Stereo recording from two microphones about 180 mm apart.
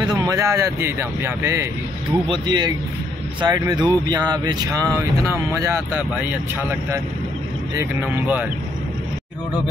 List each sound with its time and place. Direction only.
0.0 s speech: 20° right (ahead or behind)
2.2 s speech: 25° right (ahead or behind); by 8.5 s 10° right (ahead or behind)